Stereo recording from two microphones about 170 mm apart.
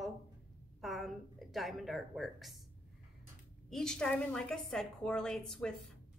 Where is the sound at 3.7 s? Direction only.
5° left (ahead or behind).